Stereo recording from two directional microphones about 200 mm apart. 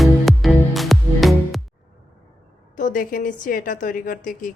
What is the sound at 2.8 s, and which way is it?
A woman's voice, 40° left (ahead or behind).